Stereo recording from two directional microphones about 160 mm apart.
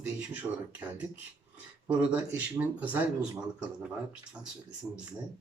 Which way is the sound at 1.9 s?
10° right (ahead or behind).